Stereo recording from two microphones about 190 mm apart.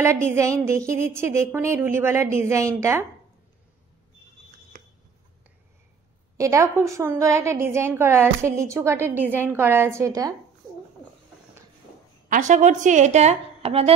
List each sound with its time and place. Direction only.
0.0 s a woman's voice: 15° right (ahead or behind)
6.3 s a woman's voice: 15° right (ahead or behind)
12.3 s a woman's voice: 40° right (ahead or behind)